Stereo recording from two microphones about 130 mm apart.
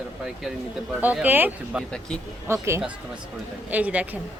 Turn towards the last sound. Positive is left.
turn(degrees=-10)  # may be behind; listen again after turning